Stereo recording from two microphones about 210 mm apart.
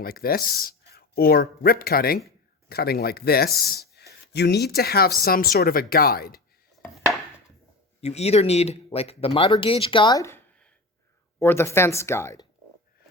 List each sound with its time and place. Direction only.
0.0 s speech: 45° left (ahead or behind)
8.0 s speech: 30° left (ahead or behind); by 12.5 s 15° left (ahead or behind)